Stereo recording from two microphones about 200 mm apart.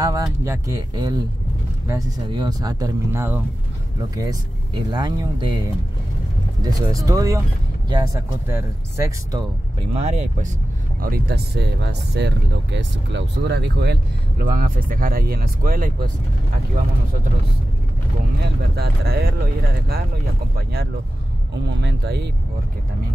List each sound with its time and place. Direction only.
0.0 s speech: 15° right (ahead or behind)
6.6 s speech: 15° right (ahead or behind)
9.8 s speech: 30° right (ahead or behind)
11.0 s speech: 50° right (ahead or behind)
14.4 s speech: 45° right (ahead or behind)
18.8 s speech: 50° right (ahead or behind)